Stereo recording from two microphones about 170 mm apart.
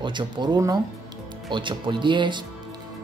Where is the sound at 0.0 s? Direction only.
25° right (ahead or behind).